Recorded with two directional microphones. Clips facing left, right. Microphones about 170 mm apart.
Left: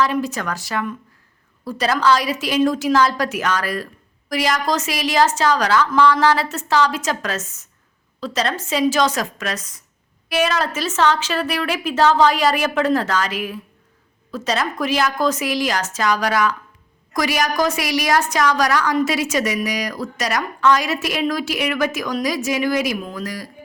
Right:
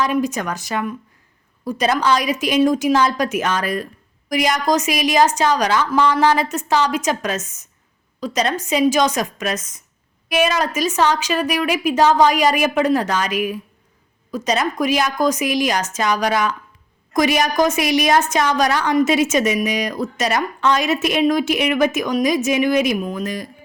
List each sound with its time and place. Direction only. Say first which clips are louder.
0.0 s a woman's voice: right 1 dB; 20° right (ahead or behind)